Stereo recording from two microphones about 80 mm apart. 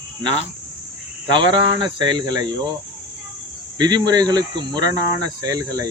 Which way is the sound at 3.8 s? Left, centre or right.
Right.